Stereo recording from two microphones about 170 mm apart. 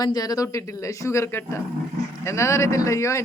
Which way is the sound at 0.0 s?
20° left (ahead or behind).